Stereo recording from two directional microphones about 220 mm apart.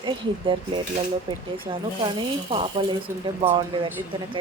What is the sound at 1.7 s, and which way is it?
Speech, 25° right (ahead or behind).